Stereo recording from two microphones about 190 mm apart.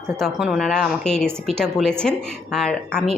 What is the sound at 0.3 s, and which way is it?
A woman's voice, centre (ahead or behind).